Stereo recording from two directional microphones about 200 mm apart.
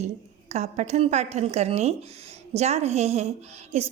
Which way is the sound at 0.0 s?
35° right (ahead or behind).